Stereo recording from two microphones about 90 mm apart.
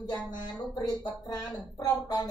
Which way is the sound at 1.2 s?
45° left (ahead or behind).